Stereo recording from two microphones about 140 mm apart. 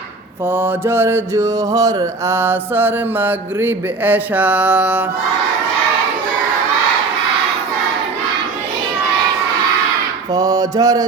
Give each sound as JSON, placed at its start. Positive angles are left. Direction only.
{"t": 0.4, "sound": "mantra", "side_deg": -15}
{"t": 10.3, "sound": "music", "side_deg": -25}